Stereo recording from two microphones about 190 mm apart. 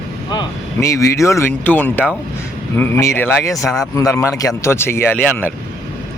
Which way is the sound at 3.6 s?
Centre (ahead or behind).